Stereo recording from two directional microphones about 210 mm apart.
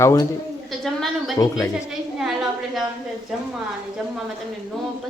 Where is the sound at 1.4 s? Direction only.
15° left (ahead or behind).